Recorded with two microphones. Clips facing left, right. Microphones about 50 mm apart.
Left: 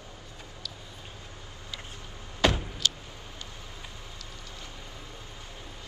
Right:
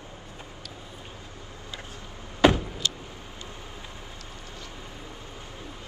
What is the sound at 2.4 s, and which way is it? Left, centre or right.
Vehicle, centre.